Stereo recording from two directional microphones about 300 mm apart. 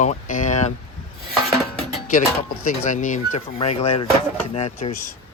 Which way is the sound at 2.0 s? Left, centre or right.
Left.